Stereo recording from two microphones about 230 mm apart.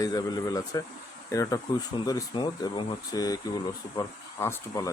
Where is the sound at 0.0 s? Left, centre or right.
Centre.